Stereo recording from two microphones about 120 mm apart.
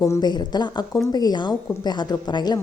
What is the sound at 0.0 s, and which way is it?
A woman's voice, 30° left (ahead or behind).